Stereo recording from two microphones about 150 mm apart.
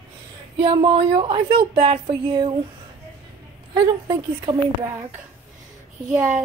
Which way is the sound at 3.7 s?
30° right (ahead or behind).